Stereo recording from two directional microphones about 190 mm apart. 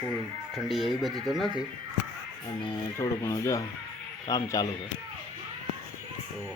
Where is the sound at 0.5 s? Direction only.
Centre (ahead or behind).